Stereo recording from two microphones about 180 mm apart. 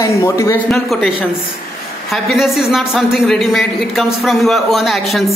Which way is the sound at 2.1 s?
Centre (ahead or behind).